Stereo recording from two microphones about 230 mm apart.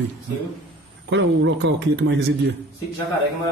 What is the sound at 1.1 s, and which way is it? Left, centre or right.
Speech, right.